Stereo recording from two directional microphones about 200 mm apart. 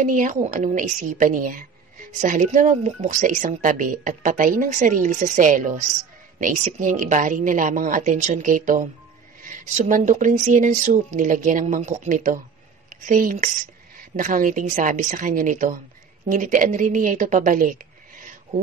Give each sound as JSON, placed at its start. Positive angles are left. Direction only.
{"t": 0.0, "sound": "speech", "side_deg": -40}